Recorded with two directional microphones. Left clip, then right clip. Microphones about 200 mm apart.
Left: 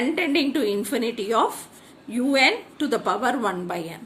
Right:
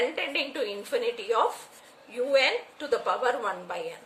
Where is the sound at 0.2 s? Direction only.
50° left (ahead or behind).